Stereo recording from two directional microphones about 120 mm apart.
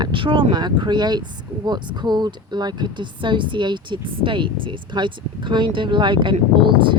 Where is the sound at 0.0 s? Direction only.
45° right (ahead or behind).